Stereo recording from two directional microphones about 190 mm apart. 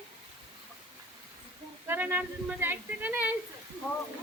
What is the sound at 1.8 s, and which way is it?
Speech, 10° right (ahead or behind).